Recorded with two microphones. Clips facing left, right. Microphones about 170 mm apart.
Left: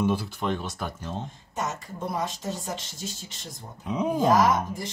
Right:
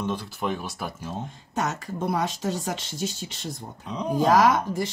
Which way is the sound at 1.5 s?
75° right (ahead or behind).